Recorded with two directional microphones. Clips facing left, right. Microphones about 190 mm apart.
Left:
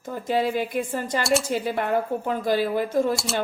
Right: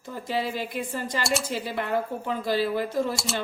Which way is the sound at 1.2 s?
Centre (ahead or behind).